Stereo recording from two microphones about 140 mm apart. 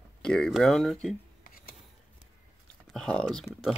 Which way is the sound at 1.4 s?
90° left.